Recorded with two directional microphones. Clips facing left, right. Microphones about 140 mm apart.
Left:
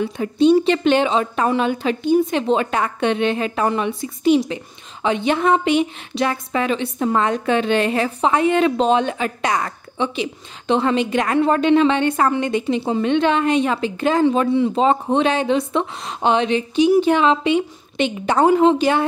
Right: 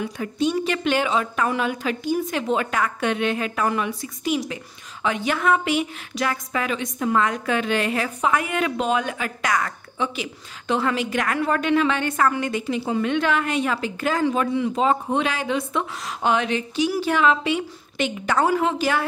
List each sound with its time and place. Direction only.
0.0 s a woman's voice: 30° left (ahead or behind)